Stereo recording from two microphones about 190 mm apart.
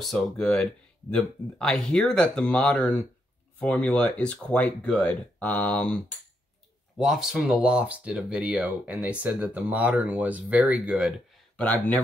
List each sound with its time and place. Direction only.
0.0 s speech: 5° left (ahead or behind)